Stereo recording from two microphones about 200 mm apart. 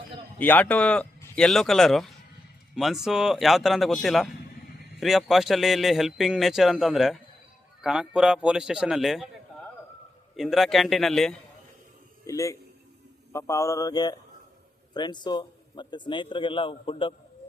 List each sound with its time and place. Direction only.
0.3 s a man's voice: 10° left (ahead or behind)
10.3 s a man's voice: centre (ahead or behind)
12.2 s a man's voice: 15° left (ahead or behind)